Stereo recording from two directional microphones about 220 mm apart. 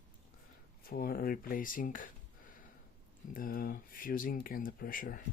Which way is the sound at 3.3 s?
40° left (ahead or behind).